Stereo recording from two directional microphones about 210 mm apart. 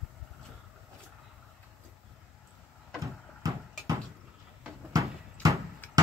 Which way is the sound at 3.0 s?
15° right (ahead or behind).